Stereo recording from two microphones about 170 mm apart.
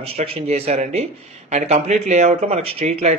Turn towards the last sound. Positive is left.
turn(degrees=-40)  # may be behind; listen again after turning